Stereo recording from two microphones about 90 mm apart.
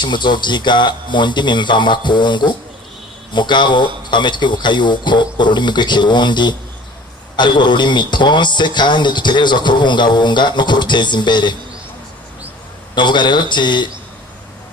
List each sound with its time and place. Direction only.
0.0 s speech: 60° left (ahead or behind)
12.9 s speech: 55° left (ahead or behind)